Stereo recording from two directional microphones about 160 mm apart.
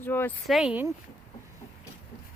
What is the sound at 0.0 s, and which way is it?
Speech, 15° left (ahead or behind).